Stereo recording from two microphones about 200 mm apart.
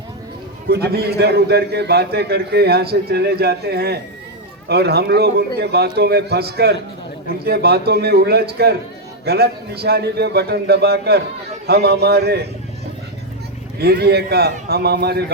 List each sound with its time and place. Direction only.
0.7 s a man's voice: 50° right (ahead or behind)
13.7 s a man's voice: 50° right (ahead or behind)